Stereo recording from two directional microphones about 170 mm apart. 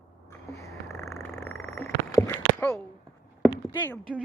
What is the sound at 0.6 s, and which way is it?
Cat, 15° left (ahead or behind).